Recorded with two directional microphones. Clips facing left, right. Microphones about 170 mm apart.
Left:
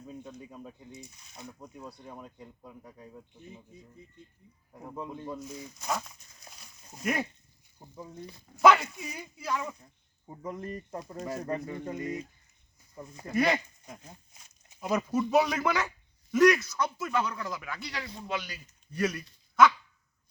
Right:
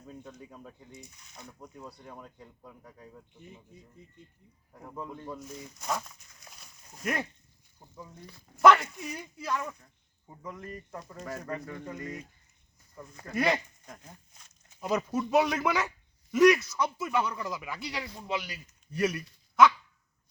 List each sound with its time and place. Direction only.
0.1 s speech: 10° left (ahead or behind)
4.7 s speech: 10° left (ahead or behind)
5.5 s speech: 5° left (ahead or behind)
6.6 s a sound: 5° left (ahead or behind)
7.8 s speech: 20° left (ahead or behind)
8.5 s speech: 5° left (ahead or behind)
9.8 s speech: 25° left (ahead or behind)
13.3 s speech: 5° left (ahead or behind)
14.0 s a sound: 20° left (ahead or behind)
14.8 s speech: centre (ahead or behind)